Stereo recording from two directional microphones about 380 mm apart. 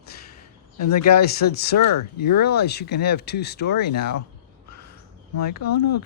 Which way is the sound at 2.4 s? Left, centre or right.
Left.